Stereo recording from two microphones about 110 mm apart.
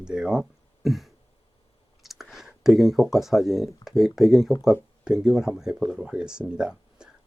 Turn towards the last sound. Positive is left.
turn(degrees=-10)  # may be behind; listen again after turning